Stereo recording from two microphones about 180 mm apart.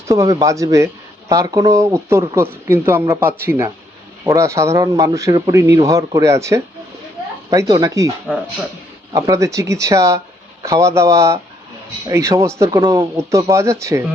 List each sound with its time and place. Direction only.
0.1 s a man's voice: 20° right (ahead or behind)
9.1 s a man's voice: 20° right (ahead or behind)